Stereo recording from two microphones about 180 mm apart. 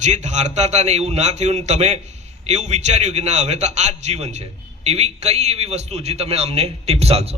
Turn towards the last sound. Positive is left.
turn(degrees=-35)  # may be behind; listen again after turning